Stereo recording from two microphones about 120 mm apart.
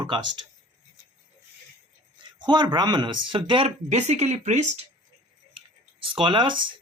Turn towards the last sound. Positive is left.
turn(degrees=-40)  # may be behind; listen again after turning